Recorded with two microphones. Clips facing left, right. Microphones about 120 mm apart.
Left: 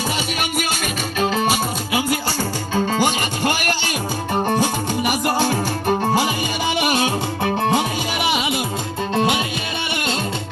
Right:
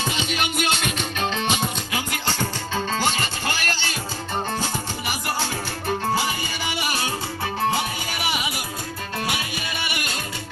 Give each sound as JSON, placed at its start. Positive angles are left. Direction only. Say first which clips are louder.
{"t": 0.3, "sound": "music", "louder": "left 1 dB", "side_deg": 5}